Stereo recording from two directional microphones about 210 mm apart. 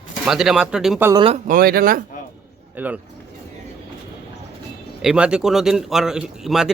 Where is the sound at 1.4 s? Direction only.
45° right (ahead or behind).